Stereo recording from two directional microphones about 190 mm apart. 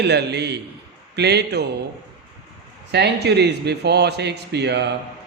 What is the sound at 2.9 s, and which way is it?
A man's voice, 60° right (ahead or behind).